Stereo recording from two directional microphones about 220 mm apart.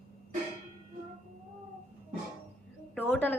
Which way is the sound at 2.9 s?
5° left (ahead or behind).